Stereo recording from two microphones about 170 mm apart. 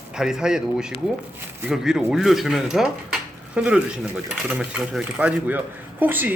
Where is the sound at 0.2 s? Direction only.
5° right (ahead or behind).